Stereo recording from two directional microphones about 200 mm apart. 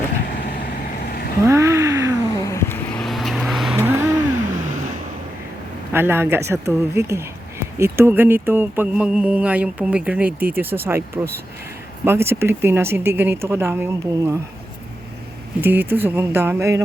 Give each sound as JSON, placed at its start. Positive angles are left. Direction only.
{"t": 0.3, "sound": "vehicle", "side_deg": 45}
{"t": 1.5, "sound": "a sound", "side_deg": -15}
{"t": 2.4, "sound": "vehicle", "side_deg": 15}
{"t": 5.9, "sound": "speech", "side_deg": -10}
{"t": 15.6, "sound": "speech", "side_deg": -10}